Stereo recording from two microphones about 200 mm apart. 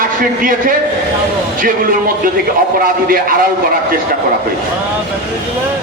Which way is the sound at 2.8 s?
45° right (ahead or behind).